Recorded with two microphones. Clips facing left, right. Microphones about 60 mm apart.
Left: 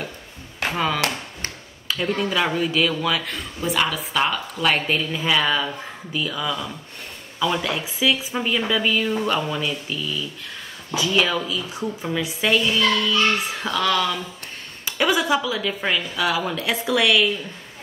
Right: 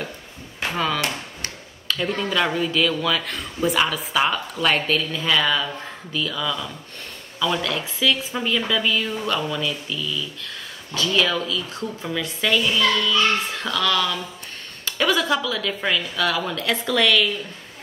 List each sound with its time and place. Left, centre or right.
0.6 s a sound: centre
1.9 s a man's voice: centre
4.8 s a woman's voice: centre
13.9 s a woman's voice: centre